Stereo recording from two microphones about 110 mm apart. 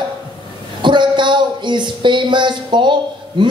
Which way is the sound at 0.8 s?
45° right (ahead or behind).